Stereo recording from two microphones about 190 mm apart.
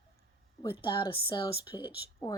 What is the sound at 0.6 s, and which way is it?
Speech, 25° left (ahead or behind).